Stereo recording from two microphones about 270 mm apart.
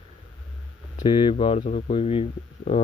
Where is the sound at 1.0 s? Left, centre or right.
Centre.